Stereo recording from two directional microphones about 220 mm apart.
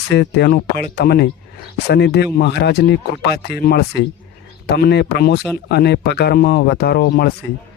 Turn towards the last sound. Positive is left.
turn(degrees=45)  # may be behind; listen again after turning